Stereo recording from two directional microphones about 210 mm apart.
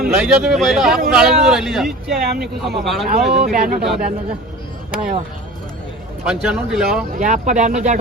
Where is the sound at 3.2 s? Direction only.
50° right (ahead or behind).